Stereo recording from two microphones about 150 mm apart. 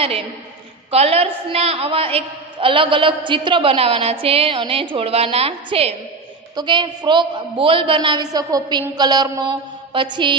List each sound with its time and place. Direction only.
0.8 s a woman's voice: 40° right (ahead or behind)
6.5 s a woman's voice: 30° right (ahead or behind)
8.9 s mantra: 30° right (ahead or behind)